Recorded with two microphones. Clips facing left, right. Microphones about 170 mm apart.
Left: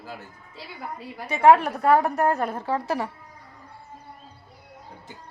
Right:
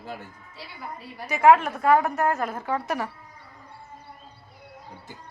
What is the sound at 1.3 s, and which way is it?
A woman's voice, 30° left (ahead or behind).